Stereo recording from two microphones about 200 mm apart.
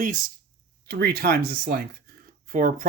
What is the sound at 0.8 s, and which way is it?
Speech, 55° right (ahead or behind).